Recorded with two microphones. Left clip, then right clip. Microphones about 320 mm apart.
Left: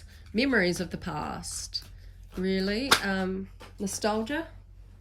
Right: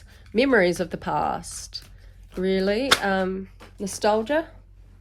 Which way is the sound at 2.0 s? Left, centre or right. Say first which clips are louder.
Right 6 dB; right.